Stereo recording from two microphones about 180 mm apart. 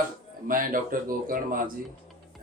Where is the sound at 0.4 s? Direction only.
50° right (ahead or behind).